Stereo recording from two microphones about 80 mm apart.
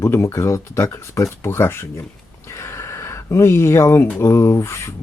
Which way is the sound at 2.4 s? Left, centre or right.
Left.